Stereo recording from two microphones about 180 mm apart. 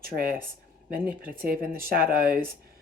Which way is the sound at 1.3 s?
55° right (ahead or behind).